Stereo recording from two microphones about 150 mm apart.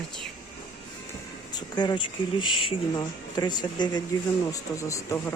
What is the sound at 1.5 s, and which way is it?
Speech, 30° left (ahead or behind).